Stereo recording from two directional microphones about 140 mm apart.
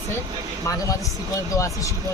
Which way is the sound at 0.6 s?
25° left (ahead or behind).